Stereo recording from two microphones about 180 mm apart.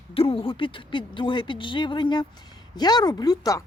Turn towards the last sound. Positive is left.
turn(degrees=20)  # may be behind; listen again after turning